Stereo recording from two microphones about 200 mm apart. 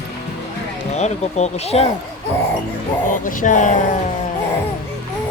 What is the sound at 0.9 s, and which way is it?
Speech, 35° left (ahead or behind).